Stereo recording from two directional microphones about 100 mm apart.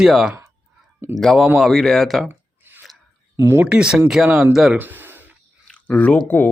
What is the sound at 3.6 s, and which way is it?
Speech, 10° right (ahead or behind).